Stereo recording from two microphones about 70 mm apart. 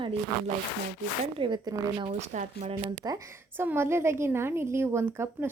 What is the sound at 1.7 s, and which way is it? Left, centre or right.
Speech, right.